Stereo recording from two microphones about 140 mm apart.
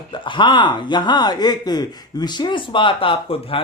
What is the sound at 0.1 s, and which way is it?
Speech, 35° left (ahead or behind).